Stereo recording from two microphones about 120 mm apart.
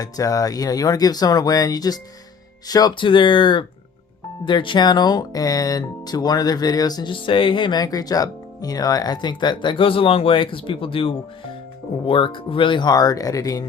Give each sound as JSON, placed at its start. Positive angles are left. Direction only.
{"t": 0.0, "sound": "speech", "side_deg": 30}